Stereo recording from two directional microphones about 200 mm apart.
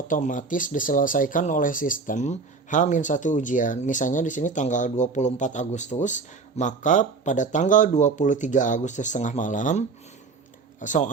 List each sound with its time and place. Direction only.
0.1 s speech: 40° left (ahead or behind)